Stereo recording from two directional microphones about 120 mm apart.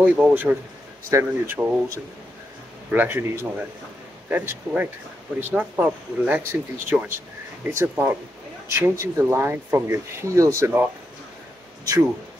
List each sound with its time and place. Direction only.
0.0 s speech: 10° right (ahead or behind)